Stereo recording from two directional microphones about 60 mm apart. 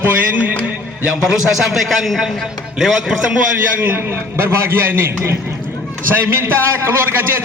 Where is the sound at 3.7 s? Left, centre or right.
Right.